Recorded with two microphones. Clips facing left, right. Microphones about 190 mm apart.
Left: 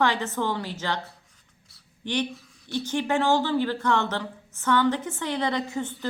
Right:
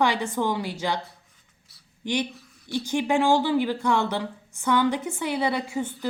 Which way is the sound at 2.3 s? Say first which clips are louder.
Right 1 dB; centre (ahead or behind).